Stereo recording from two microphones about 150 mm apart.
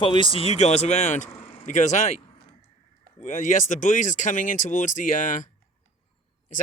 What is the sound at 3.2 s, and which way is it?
Speech, 55° left (ahead or behind).